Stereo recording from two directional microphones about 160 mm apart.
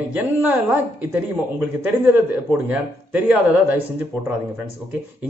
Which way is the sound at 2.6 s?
10° right (ahead or behind).